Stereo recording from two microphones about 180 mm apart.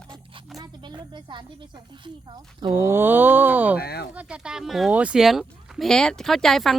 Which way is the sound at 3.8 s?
60° left (ahead or behind).